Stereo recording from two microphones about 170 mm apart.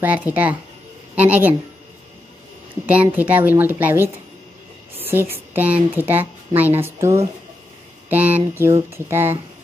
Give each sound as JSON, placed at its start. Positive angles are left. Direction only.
{"t": 0.0, "sound": "a woman's voice", "side_deg": -10}
{"t": 2.9, "sound": "a woman's voice", "side_deg": -10}
{"t": 8.1, "sound": "a sound", "side_deg": -10}
{"t": 8.5, "sound": "a woman's voice", "side_deg": -15}